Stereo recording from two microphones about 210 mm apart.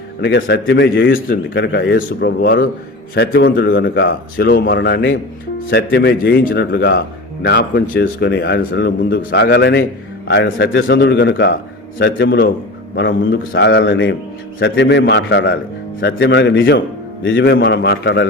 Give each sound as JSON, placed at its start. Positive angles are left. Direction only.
{"t": 0.2, "sound": "a man's voice", "side_deg": 55}
{"t": 10.8, "sound": "a man's voice", "side_deg": 45}